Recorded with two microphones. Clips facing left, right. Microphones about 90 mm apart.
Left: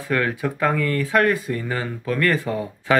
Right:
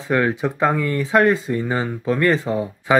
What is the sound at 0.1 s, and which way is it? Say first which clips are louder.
Speech: right 3 dB; 20° right (ahead or behind).